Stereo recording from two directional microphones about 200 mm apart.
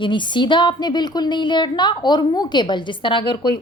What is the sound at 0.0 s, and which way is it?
A woman's voice, 25° left (ahead or behind).